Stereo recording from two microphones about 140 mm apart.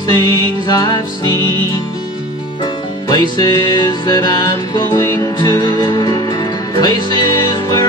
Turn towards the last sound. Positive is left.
turn(degrees=25)  # may be behind; listen again after turning